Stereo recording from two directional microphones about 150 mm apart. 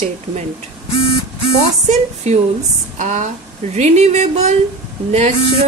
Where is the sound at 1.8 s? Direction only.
50° right (ahead or behind).